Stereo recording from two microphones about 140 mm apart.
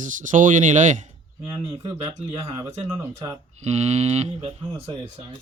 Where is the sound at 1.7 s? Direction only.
35° right (ahead or behind).